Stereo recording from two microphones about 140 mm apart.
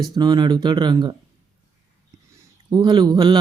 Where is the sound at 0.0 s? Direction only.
30° right (ahead or behind).